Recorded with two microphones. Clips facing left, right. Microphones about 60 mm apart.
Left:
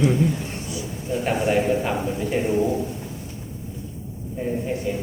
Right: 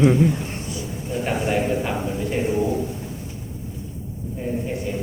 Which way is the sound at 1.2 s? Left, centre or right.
Centre.